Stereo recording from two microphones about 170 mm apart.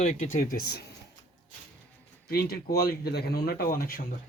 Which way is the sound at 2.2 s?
65° left (ahead or behind).